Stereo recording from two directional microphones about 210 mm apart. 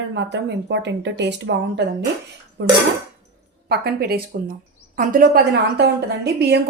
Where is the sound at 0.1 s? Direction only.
55° right (ahead or behind).